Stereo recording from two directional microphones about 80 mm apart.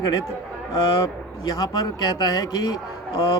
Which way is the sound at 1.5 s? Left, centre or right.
Left.